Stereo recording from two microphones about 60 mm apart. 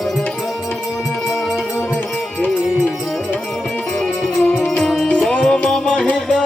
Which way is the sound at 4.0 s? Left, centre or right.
Centre.